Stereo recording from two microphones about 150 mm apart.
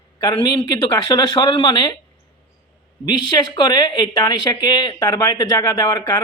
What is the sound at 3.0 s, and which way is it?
Speech, 30° left (ahead or behind).